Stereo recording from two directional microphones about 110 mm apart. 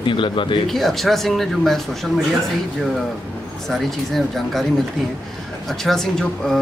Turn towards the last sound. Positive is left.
turn(degrees=5)  # may be behind; listen again after turning